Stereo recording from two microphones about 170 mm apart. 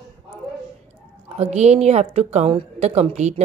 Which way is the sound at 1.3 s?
40° right (ahead or behind).